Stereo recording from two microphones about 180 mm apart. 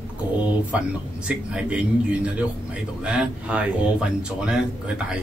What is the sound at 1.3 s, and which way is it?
A man's voice, 5° right (ahead or behind).